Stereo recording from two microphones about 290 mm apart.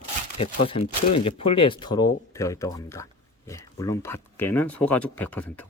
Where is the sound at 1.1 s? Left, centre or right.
Centre.